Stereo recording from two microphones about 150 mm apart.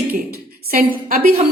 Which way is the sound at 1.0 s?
70° right (ahead or behind).